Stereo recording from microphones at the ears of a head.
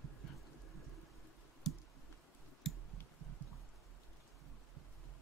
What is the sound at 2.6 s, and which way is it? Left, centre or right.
Clicking, right.